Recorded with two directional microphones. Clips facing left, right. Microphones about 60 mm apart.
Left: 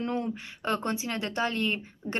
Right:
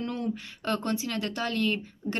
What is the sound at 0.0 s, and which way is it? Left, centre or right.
Speech, left.